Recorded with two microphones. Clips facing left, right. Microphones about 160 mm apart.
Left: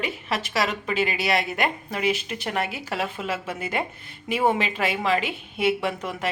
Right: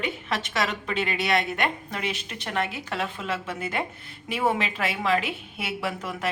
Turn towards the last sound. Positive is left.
turn(degrees=0)  # may be behind; listen again after turning